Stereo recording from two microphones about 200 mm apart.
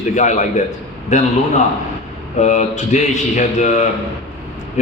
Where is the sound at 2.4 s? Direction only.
35° left (ahead or behind).